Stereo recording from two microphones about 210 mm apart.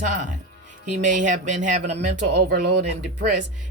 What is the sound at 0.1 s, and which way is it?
Speech, 40° right (ahead or behind).